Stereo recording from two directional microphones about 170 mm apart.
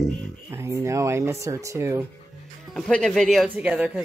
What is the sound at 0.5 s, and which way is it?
Speech, 15° right (ahead or behind).